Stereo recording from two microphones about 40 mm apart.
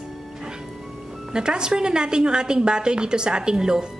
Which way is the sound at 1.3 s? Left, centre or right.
Right.